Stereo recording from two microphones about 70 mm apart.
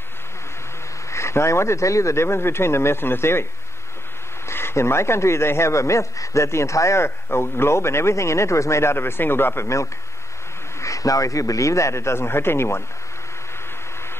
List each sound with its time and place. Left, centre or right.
1.1 s a man's voice: left
4.5 s a man's voice: left
10.8 s a man's voice: left